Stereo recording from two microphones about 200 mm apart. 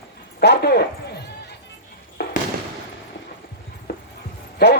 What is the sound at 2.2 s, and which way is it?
Fireworks, 55° left (ahead or behind).